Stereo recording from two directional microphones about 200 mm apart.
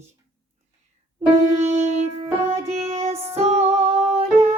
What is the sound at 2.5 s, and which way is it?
Music, 30° right (ahead or behind).